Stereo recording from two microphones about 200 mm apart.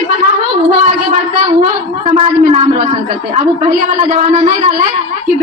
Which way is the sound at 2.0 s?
30° right (ahead or behind).